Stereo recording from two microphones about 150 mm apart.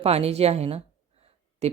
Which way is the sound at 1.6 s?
45° right (ahead or behind).